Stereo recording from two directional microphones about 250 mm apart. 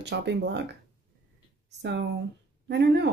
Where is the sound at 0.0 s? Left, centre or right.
Right.